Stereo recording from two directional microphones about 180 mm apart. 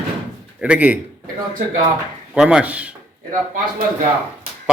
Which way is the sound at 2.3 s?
5° right (ahead or behind).